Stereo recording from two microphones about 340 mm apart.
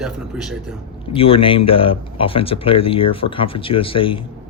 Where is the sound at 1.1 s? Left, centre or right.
Centre.